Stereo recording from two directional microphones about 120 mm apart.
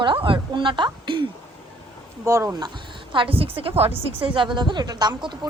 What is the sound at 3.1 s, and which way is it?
A woman's voice, 45° right (ahead or behind).